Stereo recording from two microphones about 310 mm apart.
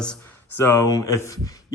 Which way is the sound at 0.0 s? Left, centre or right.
Centre.